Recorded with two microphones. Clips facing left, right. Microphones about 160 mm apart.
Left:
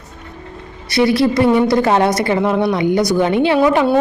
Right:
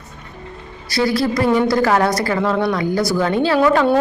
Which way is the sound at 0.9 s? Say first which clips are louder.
Left 4 dB; 25° left (ahead or behind).